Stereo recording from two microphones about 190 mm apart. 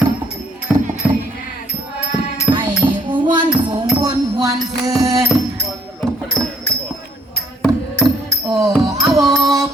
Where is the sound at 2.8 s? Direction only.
20° right (ahead or behind).